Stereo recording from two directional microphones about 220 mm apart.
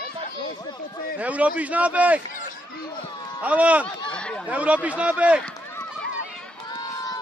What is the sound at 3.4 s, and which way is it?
Speech, 5° right (ahead or behind).